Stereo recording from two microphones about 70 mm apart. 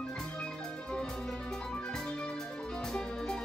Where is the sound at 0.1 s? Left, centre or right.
Centre.